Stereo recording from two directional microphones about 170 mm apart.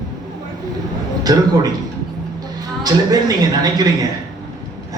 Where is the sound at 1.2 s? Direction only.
20° right (ahead or behind).